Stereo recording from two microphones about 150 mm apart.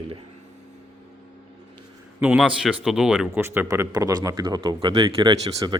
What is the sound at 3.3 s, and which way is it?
Speech, 15° right (ahead or behind).